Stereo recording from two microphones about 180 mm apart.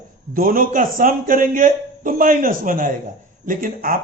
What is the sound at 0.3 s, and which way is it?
A man's voice, 50° right (ahead or behind).